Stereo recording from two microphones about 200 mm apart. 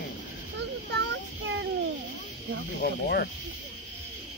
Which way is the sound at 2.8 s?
50° left (ahead or behind).